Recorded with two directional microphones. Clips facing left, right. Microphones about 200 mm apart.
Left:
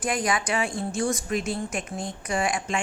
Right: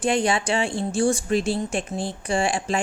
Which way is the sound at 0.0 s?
30° right (ahead or behind).